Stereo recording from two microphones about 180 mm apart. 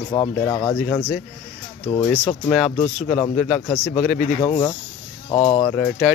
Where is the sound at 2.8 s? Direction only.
30° left (ahead or behind).